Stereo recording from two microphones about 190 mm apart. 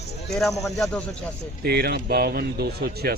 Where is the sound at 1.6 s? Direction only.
55° right (ahead or behind).